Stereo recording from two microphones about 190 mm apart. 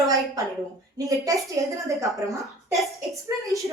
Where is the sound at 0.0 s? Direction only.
20° right (ahead or behind).